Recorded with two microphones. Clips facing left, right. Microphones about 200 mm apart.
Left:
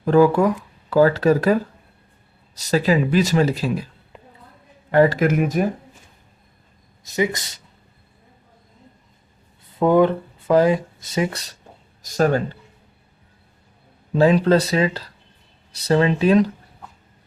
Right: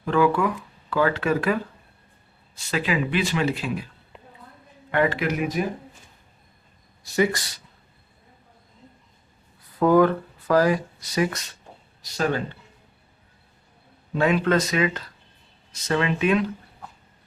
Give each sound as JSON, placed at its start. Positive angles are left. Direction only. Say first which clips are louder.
{"t": 0.0, "sound": "speech", "louder": "left 6 dB", "side_deg": 40}
{"t": 2.6, "sound": "speech", "louder": "left 7 dB", "side_deg": 40}
{"t": 4.9, "sound": "speech", "louder": "left 7 dB", "side_deg": 40}
{"t": 7.0, "sound": "speech", "louder": "even", "side_deg": 20}
{"t": 9.6, "sound": "speech", "louder": "left 2 dB", "side_deg": 25}
{"t": 12.0, "sound": "speech", "louder": "left 6 dB", "side_deg": 45}
{"t": 14.2, "sound": "speech", "louder": "left 5 dB", "side_deg": 30}